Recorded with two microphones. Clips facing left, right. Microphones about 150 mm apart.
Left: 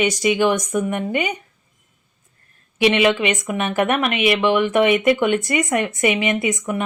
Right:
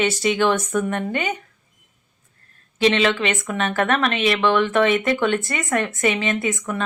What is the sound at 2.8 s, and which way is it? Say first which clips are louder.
A woman's voice: left 2 dB; 15° left (ahead or behind).